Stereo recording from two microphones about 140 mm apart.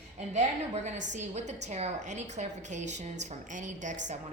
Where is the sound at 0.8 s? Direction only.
55° right (ahead or behind).